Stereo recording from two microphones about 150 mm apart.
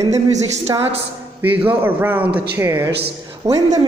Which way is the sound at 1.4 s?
15° right (ahead or behind).